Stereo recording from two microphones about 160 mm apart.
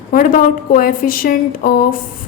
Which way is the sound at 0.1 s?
60° left (ahead or behind).